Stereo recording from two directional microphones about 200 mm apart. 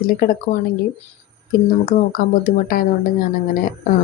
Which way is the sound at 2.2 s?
45° left (ahead or behind).